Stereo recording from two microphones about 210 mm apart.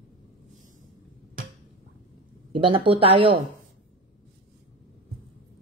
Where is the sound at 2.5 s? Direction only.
25° right (ahead or behind).